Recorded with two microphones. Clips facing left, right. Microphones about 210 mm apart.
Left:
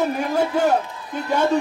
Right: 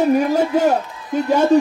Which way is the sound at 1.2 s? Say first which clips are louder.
Right 6 dB; 20° right (ahead or behind).